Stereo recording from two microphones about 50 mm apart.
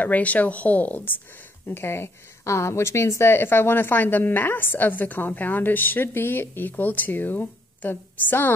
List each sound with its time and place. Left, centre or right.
0.0 s speech: left
1.7 s a woman's voice: left